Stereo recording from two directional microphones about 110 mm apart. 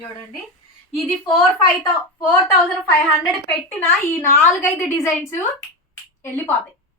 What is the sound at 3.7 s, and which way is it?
A woman's voice, 20° left (ahead or behind).